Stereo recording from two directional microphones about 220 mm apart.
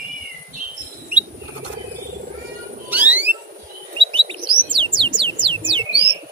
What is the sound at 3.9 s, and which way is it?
Bird, 20° right (ahead or behind).